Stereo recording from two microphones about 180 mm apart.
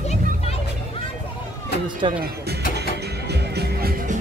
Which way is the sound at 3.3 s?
65° right (ahead or behind).